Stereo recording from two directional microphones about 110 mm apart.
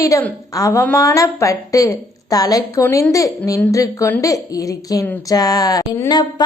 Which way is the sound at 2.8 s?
20° left (ahead or behind).